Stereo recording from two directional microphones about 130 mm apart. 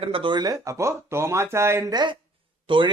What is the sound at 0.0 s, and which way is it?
Speech, 40° right (ahead or behind).